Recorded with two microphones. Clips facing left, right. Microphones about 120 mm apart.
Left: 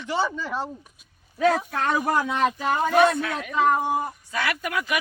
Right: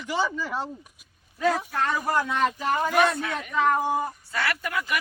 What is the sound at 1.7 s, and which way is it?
Speech, 65° left (ahead or behind).